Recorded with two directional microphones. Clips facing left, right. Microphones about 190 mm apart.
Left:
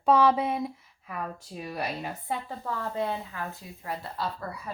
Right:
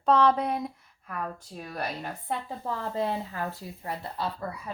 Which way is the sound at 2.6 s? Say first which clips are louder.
Right 2 dB; 35° right (ahead or behind).